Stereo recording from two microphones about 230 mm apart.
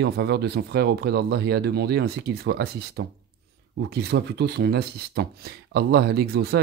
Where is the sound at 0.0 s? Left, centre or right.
Right.